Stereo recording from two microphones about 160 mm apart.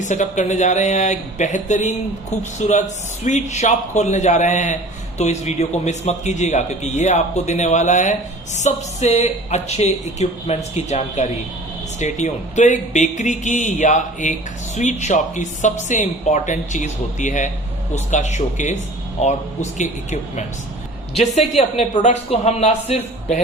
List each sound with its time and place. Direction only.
0.0 s a man's voice: 50° left (ahead or behind)